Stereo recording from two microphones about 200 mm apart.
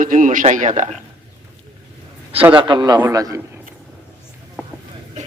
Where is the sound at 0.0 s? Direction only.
40° right (ahead or behind).